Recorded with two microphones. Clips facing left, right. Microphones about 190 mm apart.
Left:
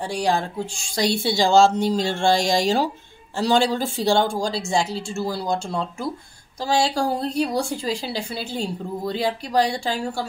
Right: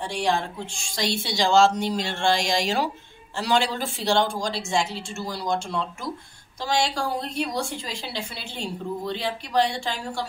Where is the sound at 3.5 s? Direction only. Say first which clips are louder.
Left 4 dB; 35° left (ahead or behind).